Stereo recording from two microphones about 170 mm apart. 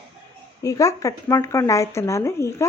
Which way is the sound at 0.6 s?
20° left (ahead or behind).